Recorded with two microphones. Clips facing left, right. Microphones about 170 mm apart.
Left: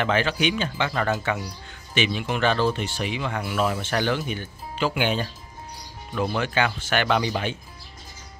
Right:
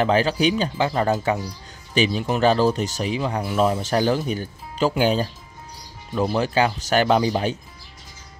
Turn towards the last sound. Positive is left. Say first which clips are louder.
# right 4 dB
turn(degrees=-35)  # may be behind; listen again after turning